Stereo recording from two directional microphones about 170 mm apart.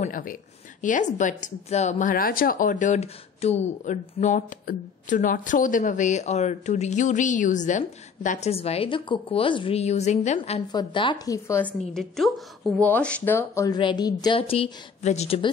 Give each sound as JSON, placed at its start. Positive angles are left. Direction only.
{"t": 0.0, "sound": "a woman's voice", "side_deg": 55}
{"t": 10.7, "sound": "speech", "side_deg": 25}
{"t": 11.9, "sound": "a woman's voice", "side_deg": 0}